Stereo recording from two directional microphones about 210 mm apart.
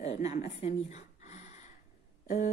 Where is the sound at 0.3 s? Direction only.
30° left (ahead or behind).